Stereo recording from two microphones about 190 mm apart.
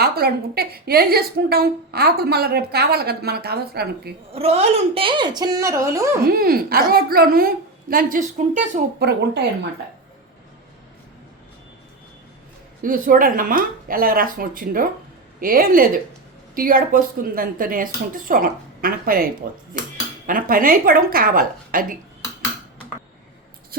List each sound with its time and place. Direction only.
0.0 s a woman's voice: 55° right (ahead or behind)
4.3 s a woman's voice: 30° right (ahead or behind); by 6.1 s 15° right (ahead or behind)
6.2 s a woman's voice: 50° right (ahead or behind)
12.8 s speech: 45° right (ahead or behind)